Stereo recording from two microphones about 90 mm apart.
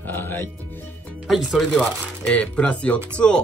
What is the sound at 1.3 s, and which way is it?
Speech, 5° right (ahead or behind).